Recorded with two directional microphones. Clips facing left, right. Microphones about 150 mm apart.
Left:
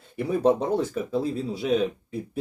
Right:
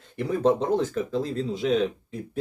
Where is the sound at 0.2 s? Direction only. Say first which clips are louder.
Left 1 dB; 10° left (ahead or behind).